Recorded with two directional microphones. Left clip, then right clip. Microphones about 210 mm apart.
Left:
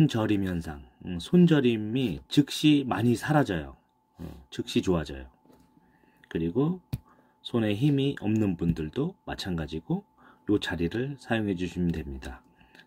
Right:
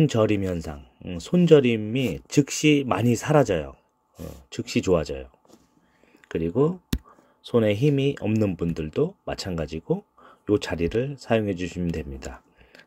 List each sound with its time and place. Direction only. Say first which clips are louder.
0.0 s speech: right 5 dB; 25° right (ahead or behind)
4.7 s speech: right 6 dB; 25° right (ahead or behind)
6.3 s speech: right 6 dB; 30° right (ahead or behind)